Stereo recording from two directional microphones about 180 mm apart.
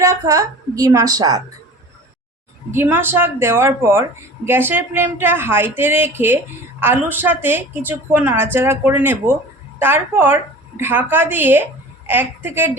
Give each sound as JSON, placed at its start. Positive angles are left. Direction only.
{"t": 0.0, "sound": "a woman's voice", "side_deg": -20}
{"t": 2.7, "sound": "speech", "side_deg": -10}